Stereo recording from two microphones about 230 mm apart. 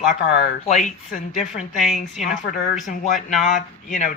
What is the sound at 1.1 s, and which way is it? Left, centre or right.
Speech, left.